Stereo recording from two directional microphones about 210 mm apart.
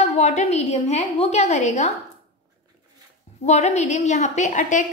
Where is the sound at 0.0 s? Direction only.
30° left (ahead or behind).